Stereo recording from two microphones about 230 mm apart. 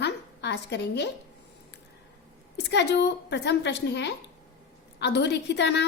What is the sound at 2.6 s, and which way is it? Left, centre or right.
A woman's voice, left.